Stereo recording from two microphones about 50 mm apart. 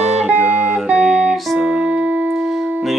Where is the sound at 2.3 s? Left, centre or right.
Centre.